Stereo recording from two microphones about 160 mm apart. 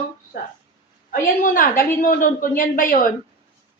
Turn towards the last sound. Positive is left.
turn(degrees=60)  # may be behind; listen again after turning